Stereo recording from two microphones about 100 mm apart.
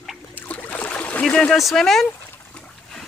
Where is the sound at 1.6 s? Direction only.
Centre (ahead or behind).